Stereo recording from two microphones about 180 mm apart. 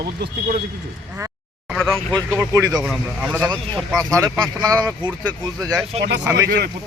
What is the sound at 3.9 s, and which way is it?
A man's voice, 20° right (ahead or behind).